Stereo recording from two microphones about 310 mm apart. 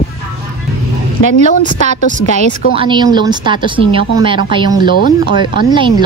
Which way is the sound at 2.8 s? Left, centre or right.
Centre.